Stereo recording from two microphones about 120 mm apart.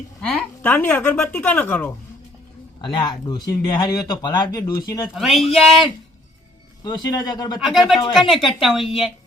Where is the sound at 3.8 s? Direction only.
40° left (ahead or behind).